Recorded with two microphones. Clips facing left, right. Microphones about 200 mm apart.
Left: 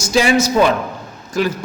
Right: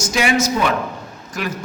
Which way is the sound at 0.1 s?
30° left (ahead or behind).